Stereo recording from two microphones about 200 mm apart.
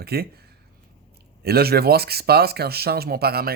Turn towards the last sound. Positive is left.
turn(degrees=-50)  # may be behind; listen again after turning